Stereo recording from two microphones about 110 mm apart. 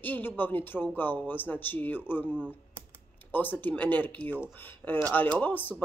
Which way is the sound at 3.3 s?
15° left (ahead or behind).